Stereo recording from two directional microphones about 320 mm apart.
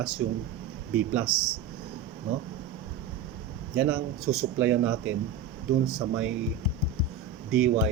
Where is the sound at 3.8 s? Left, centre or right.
Right.